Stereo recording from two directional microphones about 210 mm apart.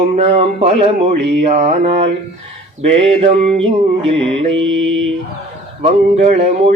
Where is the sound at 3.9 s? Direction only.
25° right (ahead or behind).